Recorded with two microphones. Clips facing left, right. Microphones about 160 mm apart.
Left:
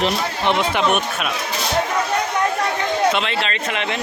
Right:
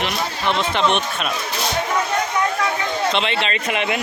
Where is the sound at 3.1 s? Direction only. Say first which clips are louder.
Right 1 dB; centre (ahead or behind).